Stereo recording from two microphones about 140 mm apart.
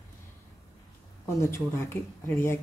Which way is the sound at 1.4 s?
20° left (ahead or behind).